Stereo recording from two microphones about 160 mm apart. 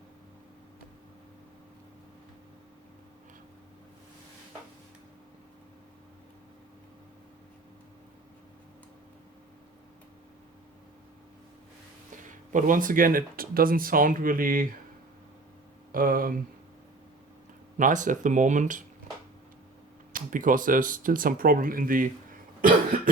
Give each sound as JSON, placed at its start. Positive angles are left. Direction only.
{"t": 12.2, "sound": "speech", "side_deg": -55}
{"t": 15.9, "sound": "speech", "side_deg": -60}
{"t": 17.7, "sound": "speech", "side_deg": -55}
{"t": 20.1, "sound": "speech", "side_deg": -55}